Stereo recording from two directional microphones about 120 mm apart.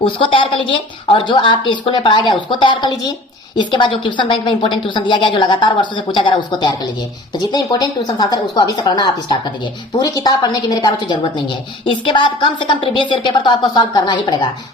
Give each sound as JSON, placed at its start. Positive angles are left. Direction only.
{"t": 0.0, "sound": "a woman's voice", "side_deg": 45}